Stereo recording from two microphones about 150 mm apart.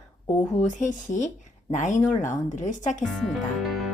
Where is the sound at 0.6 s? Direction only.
55° left (ahead or behind).